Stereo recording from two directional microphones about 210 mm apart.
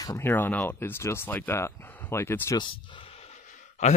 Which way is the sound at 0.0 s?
10° left (ahead or behind).